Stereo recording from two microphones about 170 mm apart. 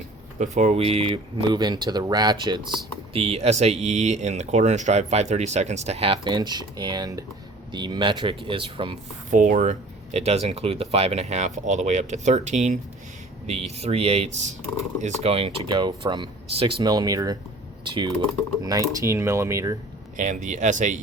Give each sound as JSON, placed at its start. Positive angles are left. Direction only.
{"t": 0.3, "sound": "speech", "side_deg": -45}
{"t": 9.3, "sound": "speech", "side_deg": -50}
{"t": 20.1, "sound": "speech", "side_deg": -45}